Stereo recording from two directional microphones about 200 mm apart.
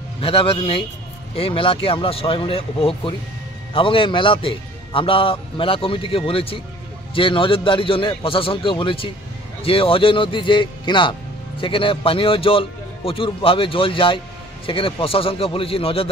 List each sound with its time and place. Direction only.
0.2 s a man's voice: 30° left (ahead or behind)